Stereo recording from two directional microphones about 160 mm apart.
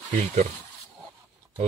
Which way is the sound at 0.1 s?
45° right (ahead or behind).